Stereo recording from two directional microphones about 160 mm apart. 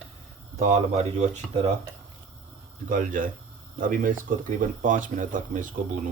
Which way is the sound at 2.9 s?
55° right (ahead or behind).